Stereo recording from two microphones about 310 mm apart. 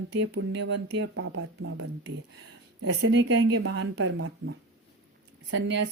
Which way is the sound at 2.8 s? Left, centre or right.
Right.